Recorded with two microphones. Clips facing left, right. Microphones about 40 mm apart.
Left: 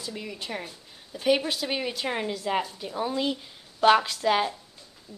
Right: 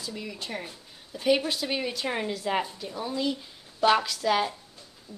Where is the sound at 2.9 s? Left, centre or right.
Left.